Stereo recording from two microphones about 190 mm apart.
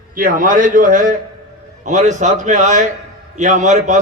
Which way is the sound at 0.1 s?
45° right (ahead or behind).